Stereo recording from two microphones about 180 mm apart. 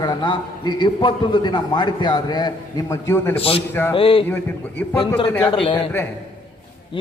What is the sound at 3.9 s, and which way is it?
A man's voice, 30° left (ahead or behind).